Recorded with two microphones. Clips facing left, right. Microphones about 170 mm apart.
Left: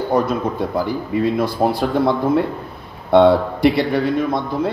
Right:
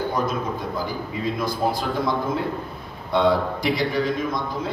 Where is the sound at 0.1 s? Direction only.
65° left (ahead or behind).